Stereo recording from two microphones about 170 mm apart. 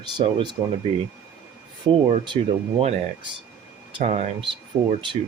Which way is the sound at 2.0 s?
30° right (ahead or behind).